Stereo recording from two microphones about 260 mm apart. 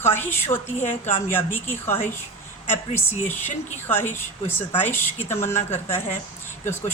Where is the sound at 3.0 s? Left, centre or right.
Centre.